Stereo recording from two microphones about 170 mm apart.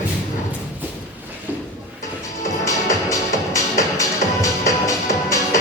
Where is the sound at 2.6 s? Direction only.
20° left (ahead or behind).